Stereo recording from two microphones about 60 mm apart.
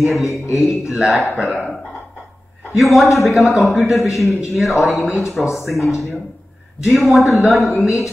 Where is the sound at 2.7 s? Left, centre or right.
Centre.